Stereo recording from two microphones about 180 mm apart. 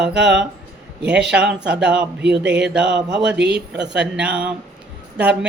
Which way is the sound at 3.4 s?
70° right (ahead or behind).